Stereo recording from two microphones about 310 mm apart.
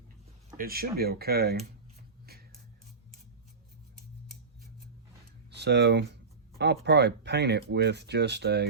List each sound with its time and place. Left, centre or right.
0.5 s speech: right
5.5 s speech: right